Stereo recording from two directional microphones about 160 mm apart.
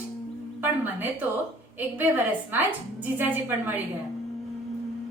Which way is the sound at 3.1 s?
10° right (ahead or behind).